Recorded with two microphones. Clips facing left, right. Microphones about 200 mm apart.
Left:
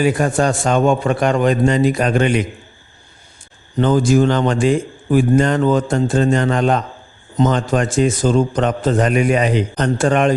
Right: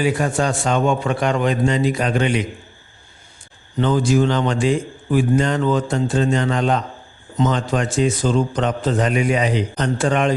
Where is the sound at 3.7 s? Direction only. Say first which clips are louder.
Left 3 dB; 45° left (ahead or behind).